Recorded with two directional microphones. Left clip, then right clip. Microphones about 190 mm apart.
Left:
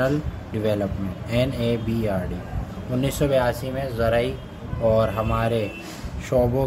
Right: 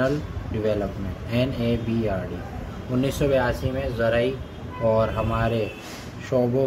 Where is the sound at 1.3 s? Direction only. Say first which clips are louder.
Left 2 dB; 15° left (ahead or behind).